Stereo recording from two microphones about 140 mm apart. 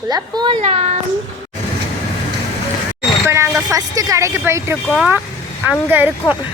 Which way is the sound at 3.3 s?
20° right (ahead or behind).